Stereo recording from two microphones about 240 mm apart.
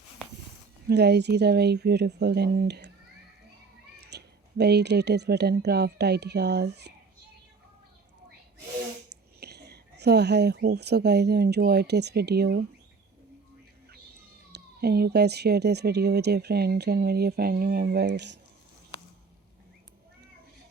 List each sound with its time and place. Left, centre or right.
0.9 s speech: right
3.9 s speech: right
9.0 s speech: right
14.5 s speech: right